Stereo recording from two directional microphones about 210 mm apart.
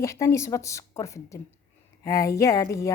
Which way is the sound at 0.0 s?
15° left (ahead or behind).